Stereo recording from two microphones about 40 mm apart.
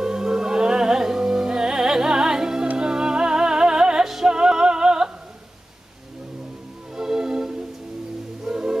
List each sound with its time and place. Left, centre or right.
0.0 s music: centre
7.0 s music: centre